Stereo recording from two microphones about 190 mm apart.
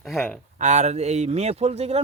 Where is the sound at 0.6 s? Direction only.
35° right (ahead or behind).